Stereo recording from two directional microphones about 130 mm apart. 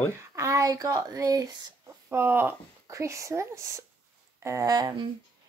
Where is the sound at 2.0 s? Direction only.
15° right (ahead or behind); by 5.1 s 35° right (ahead or behind).